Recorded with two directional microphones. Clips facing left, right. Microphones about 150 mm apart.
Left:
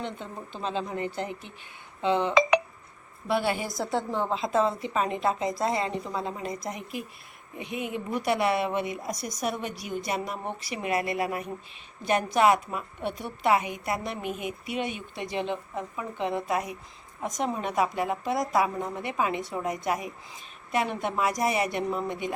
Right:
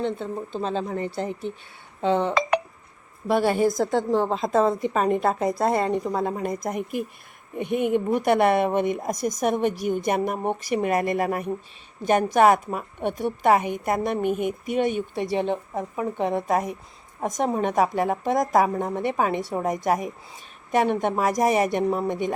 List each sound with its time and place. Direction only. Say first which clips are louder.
0.2 s speech: right 7 dB; 40° right (ahead or behind)